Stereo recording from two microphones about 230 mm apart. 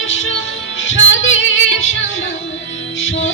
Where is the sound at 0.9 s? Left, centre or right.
Left.